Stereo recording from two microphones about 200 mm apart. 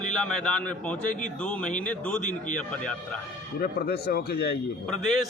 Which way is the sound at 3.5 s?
50° left (ahead or behind).